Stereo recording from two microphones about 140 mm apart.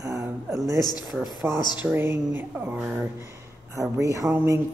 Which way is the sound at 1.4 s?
15° right (ahead or behind).